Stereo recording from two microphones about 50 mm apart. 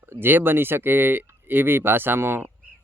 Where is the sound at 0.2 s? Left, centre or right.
Right.